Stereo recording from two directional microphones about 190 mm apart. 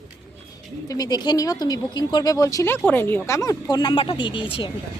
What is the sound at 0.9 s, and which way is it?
Speech, 20° left (ahead or behind).